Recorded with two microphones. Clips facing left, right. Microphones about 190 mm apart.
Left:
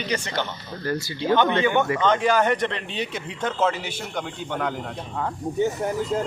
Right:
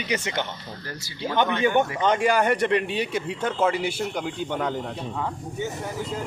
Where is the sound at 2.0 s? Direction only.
10° right (ahead or behind).